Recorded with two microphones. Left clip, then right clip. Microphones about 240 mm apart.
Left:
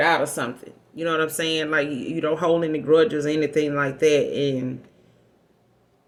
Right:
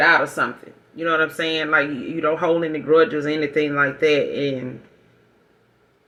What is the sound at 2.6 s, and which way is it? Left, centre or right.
Speech, left.